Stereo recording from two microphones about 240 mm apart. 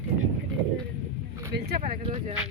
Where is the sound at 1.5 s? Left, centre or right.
Right.